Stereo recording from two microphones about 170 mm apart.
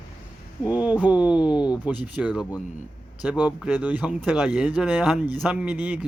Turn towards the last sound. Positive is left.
turn(degrees=-10)  # may be behind; listen again after turning